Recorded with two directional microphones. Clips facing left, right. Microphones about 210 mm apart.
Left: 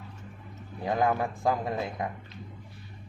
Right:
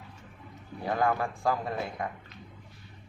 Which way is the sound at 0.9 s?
20° left (ahead or behind).